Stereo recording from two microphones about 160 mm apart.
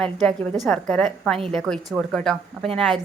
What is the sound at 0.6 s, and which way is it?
Speech, 5° left (ahead or behind).